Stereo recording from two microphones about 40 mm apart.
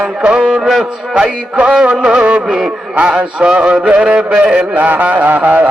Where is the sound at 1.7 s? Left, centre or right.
Right.